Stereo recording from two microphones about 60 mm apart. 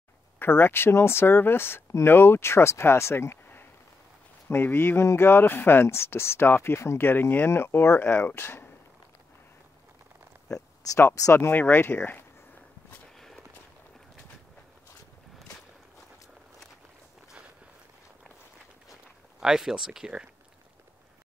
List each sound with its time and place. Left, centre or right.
0.4 s speech: left
4.5 s speech: left
7.1 s speech: left
11.3 s speech: left
19.4 s speech: centre